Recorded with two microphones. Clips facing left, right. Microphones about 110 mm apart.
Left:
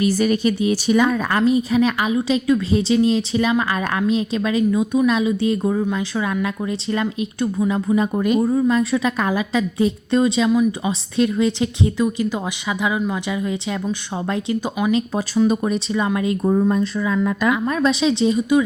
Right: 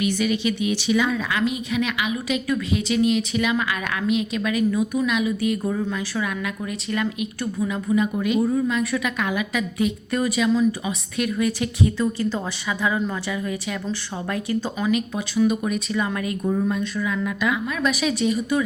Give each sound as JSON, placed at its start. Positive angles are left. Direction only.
{"t": 0.0, "sound": "speech", "side_deg": 40}
{"t": 2.1, "sound": "a woman's voice", "side_deg": 25}
{"t": 8.1, "sound": "speech", "side_deg": 45}
{"t": 8.5, "sound": "a woman's voice", "side_deg": 30}
{"t": 14.9, "sound": "a woman's voice", "side_deg": 30}
{"t": 16.5, "sound": "a woman's voice", "side_deg": 35}